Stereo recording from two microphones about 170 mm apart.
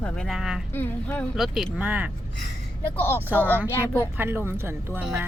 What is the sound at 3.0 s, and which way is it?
Speech, 15° left (ahead or behind).